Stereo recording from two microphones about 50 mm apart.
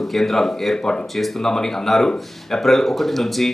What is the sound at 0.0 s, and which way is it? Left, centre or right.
Speech, centre.